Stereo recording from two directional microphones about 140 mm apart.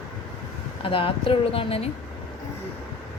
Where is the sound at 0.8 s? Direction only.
40° left (ahead or behind).